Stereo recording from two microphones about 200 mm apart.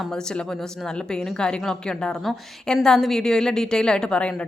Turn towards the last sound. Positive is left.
turn(degrees=5)  # may be behind; listen again after turning